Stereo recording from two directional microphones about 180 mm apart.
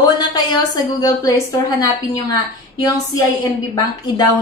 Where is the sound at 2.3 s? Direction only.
20° left (ahead or behind).